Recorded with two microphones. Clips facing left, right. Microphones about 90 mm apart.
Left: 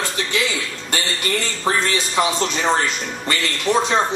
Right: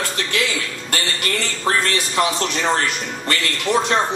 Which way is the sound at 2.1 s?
10° left (ahead or behind).